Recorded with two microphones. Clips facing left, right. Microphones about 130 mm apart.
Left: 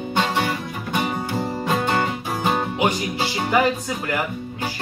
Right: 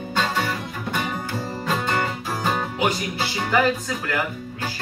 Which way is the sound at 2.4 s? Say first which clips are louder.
Left 3 dB; 15° left (ahead or behind).